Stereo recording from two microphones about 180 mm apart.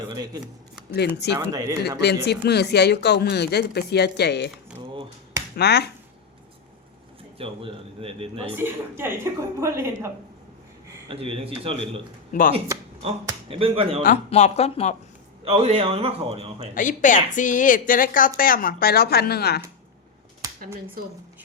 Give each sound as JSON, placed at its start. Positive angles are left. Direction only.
{"t": 0.1, "sound": "speech", "side_deg": -20}
{"t": 0.9, "sound": "speech", "side_deg": 65}
{"t": 1.4, "sound": "a woman's voice", "side_deg": -20}
{"t": 2.0, "sound": "speech", "side_deg": 65}
{"t": 5.5, "sound": "speech", "side_deg": 65}
{"t": 7.3, "sound": "a man's voice", "side_deg": -30}
{"t": 8.5, "sound": "a woman's voice", "side_deg": -15}
{"t": 11.1, "sound": "a man's voice", "side_deg": -30}
{"t": 13.5, "sound": "a man's voice", "side_deg": -30}
{"t": 14.3, "sound": "speech", "side_deg": 40}
{"t": 15.4, "sound": "a man's voice", "side_deg": -35}
{"t": 16.7, "sound": "speech", "side_deg": 45}